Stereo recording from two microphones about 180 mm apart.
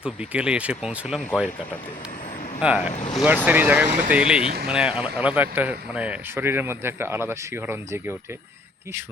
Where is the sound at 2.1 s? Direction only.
45° left (ahead or behind).